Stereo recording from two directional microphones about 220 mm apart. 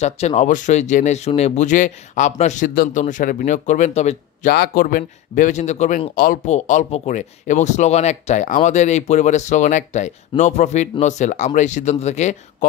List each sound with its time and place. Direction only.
0.0 s speech: 30° left (ahead or behind)